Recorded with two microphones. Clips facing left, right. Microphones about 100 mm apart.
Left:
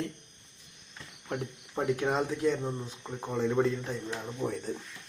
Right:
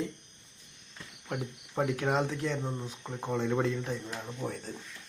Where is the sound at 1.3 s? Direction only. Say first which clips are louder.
Left 1 dB; centre (ahead or behind).